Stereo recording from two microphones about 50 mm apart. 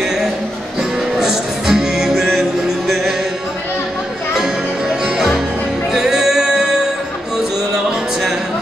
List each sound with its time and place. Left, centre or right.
1.2 s music: centre
5.9 s music: centre